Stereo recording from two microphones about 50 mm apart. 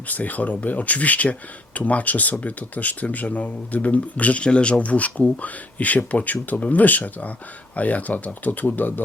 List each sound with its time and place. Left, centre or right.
0.1 s speech: left